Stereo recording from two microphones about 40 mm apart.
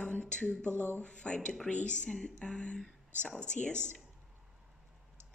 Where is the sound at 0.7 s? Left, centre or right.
Left.